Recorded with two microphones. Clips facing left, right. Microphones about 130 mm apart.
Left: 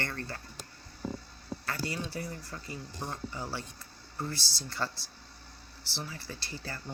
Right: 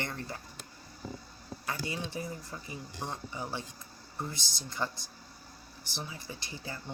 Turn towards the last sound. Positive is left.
turn(degrees=-15)  # may be behind; listen again after turning